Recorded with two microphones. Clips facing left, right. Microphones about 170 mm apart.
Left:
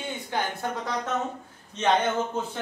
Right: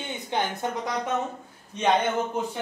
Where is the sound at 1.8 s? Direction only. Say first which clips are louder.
Right 1 dB; 10° right (ahead or behind).